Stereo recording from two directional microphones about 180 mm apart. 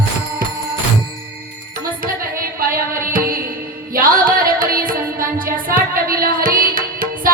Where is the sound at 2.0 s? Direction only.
55° right (ahead or behind).